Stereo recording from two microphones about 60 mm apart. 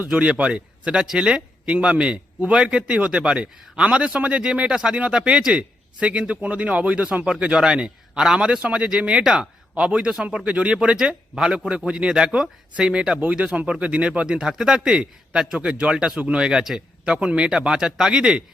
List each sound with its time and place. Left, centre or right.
0.1 s speech: centre